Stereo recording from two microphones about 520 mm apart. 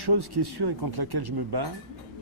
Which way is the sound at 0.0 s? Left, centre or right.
Right.